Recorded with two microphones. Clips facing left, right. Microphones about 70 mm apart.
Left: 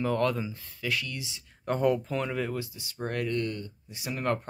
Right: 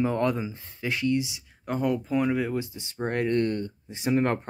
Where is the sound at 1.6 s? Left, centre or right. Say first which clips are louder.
Left 1 dB; centre; by 4.3 s right.